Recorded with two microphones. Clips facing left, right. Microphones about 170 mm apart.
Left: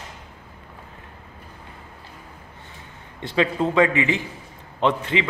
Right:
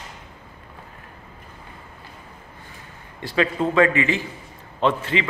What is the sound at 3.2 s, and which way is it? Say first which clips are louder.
A man's voice: even; 20° left (ahead or behind).